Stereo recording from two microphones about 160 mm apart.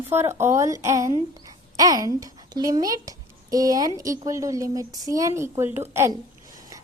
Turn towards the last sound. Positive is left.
turn(degrees=-15)  # may be behind; listen again after turning